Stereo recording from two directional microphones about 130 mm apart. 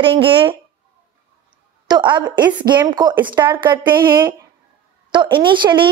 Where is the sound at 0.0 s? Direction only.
40° right (ahead or behind).